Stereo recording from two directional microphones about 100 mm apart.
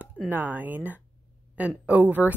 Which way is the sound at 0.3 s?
20° right (ahead or behind).